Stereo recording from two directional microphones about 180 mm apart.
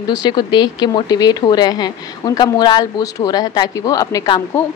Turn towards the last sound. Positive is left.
turn(degrees=15)  # may be behind; listen again after turning